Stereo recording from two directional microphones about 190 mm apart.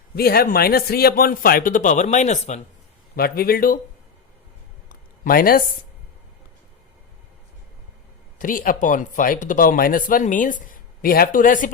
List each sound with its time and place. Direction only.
0.2 s speech: 55° left (ahead or behind); by 2.6 s 40° left (ahead or behind)
3.2 s speech: 50° left (ahead or behind)
5.2 s speech: 50° left (ahead or behind)
8.4 s speech: 45° left (ahead or behind)